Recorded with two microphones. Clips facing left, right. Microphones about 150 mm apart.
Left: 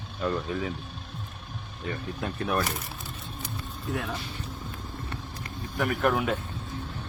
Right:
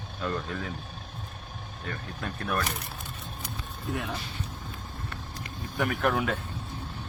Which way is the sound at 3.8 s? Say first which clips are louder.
Left 1 dB; centre (ahead or behind).